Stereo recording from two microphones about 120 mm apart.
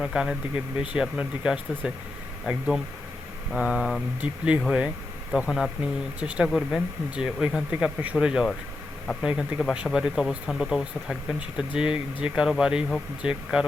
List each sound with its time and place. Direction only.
0.0 s speech: 5° right (ahead or behind)